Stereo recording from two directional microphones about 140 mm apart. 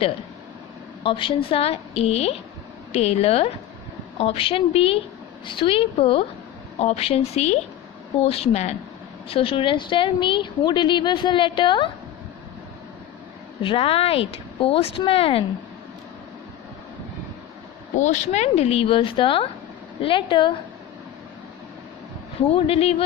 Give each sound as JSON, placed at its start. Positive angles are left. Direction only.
{"t": 1.0, "sound": "a woman's voice", "side_deg": 40}
{"t": 13.6, "sound": "speech", "side_deg": 40}
{"t": 17.9, "sound": "a woman's voice", "side_deg": 60}
{"t": 22.5, "sound": "speech", "side_deg": 45}